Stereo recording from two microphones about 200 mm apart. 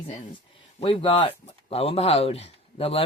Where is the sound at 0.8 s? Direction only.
25° left (ahead or behind).